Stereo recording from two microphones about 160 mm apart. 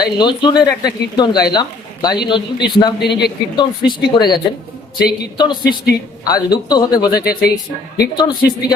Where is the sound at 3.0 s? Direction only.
90° left.